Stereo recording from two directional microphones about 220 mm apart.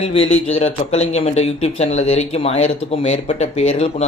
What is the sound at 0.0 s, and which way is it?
Speech, 25° left (ahead or behind).